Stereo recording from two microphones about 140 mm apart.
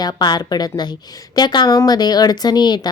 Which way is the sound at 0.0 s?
30° left (ahead or behind).